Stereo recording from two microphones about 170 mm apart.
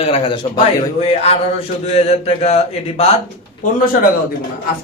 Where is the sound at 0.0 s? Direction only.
35° left (ahead or behind).